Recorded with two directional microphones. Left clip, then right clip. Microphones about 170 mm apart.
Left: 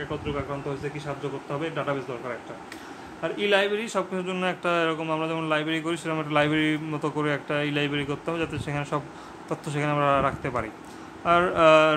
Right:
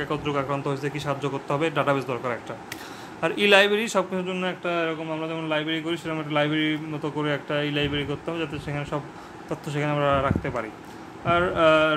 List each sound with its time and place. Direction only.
0.0 s a man's voice: 45° right (ahead or behind)
4.3 s a man's voice: 15° left (ahead or behind)
4.7 s a man's voice: 30° left (ahead or behind); by 11.9 s 15° left (ahead or behind)